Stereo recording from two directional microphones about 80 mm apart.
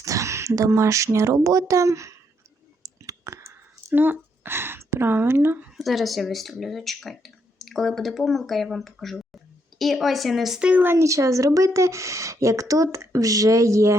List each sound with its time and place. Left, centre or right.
0.0 s speech: right
2.8 s a sound: right
5.7 s speech: centre
10.7 s speech: centre
10.9 s speech: right